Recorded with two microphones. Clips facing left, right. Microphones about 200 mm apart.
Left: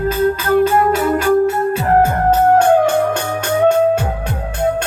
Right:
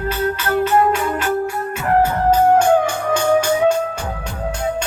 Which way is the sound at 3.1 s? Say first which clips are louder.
Right 3 dB; 60° left (ahead or behind).